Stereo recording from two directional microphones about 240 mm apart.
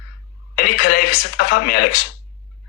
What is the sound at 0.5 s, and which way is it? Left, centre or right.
Speech, left.